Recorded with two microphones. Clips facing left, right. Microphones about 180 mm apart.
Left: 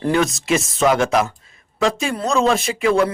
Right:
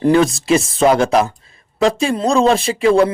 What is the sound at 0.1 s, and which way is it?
Speech, 30° right (ahead or behind).